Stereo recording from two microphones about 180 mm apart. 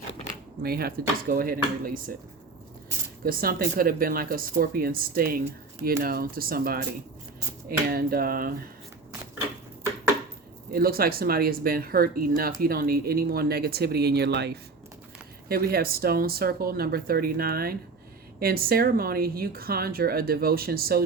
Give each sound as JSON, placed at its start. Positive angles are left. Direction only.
{"t": 0.6, "sound": "speech", "side_deg": -60}
{"t": 3.2, "sound": "speech", "side_deg": -55}
{"t": 10.7, "sound": "speech", "side_deg": -55}
{"t": 15.4, "sound": "speech", "side_deg": -55}